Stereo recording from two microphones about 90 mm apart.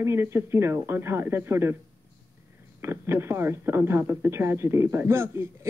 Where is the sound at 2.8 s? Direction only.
30° right (ahead or behind).